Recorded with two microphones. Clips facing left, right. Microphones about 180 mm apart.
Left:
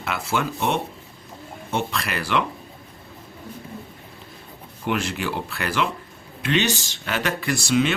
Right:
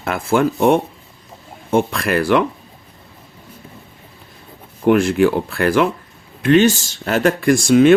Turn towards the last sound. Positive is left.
turn(degrees=-50)  # may be behind; listen again after turning